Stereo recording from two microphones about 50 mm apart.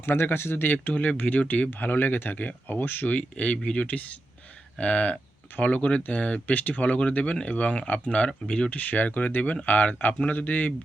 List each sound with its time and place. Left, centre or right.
0.0 s speech: left
1.7 s speech: left; by 8.7 s centre
8.7 s speech: left